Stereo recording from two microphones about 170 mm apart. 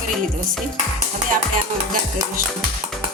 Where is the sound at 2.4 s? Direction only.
55° right (ahead or behind).